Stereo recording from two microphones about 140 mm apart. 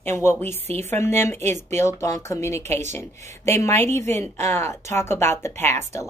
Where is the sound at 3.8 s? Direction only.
55° right (ahead or behind).